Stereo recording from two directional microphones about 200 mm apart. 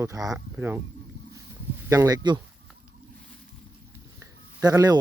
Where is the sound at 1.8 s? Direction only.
15° right (ahead or behind).